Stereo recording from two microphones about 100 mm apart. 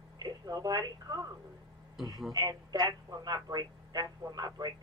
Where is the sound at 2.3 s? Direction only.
40° right (ahead or behind).